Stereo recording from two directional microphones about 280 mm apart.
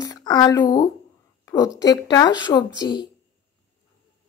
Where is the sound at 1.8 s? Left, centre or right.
Centre.